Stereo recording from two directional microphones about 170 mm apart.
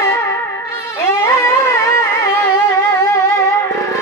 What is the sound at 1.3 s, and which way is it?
Music, 15° left (ahead or behind).